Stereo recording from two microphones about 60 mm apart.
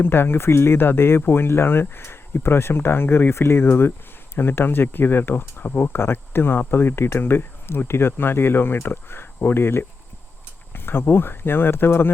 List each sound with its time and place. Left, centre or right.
0.0 s speech: left